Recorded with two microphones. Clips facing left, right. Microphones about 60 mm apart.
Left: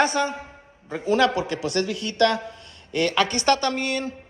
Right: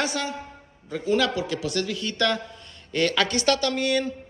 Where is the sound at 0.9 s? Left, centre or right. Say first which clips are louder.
Left 3 dB; left.